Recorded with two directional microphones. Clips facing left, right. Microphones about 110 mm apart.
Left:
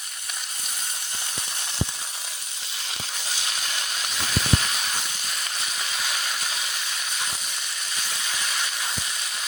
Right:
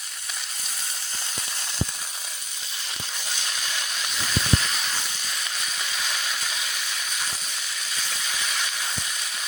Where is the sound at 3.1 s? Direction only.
5° left (ahead or behind).